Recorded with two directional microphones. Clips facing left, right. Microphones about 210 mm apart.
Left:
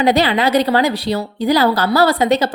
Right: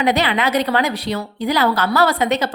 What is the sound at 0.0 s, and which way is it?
A woman's voice, 35° left (ahead or behind).